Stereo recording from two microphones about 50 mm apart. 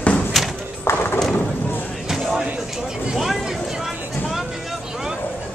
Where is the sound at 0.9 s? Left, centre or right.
Left.